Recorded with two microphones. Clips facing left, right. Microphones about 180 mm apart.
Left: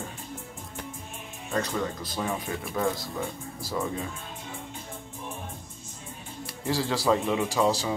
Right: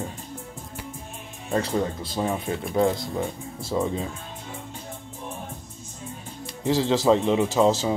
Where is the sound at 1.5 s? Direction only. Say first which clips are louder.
Right 4 dB; 30° right (ahead or behind).